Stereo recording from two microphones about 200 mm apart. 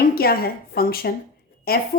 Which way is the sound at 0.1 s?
50° left (ahead or behind).